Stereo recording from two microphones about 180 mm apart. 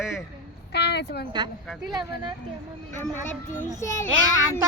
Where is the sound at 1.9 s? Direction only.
25° right (ahead or behind).